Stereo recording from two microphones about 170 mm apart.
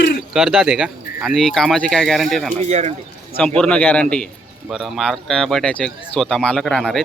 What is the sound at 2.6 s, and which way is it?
Speech, 40° right (ahead or behind).